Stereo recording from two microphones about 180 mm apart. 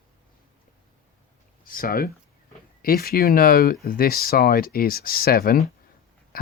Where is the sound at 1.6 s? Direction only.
50° left (ahead or behind).